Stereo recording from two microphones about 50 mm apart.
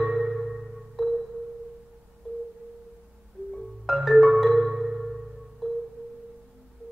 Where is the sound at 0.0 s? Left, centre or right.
Centre.